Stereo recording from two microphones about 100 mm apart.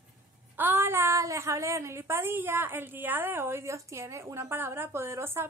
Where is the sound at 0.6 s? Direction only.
20° right (ahead or behind).